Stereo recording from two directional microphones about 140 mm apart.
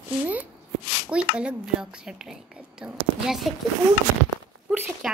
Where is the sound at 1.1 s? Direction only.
10° right (ahead or behind).